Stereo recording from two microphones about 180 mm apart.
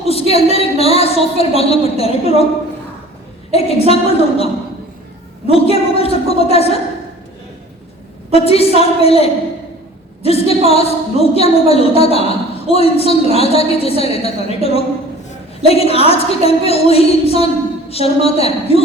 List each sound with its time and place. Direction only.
0.0 s a woman's voice: 35° left (ahead or behind)
3.5 s a woman's voice: 35° left (ahead or behind)
5.5 s a woman's voice: 35° left (ahead or behind)
8.3 s a woman's voice: 35° left (ahead or behind)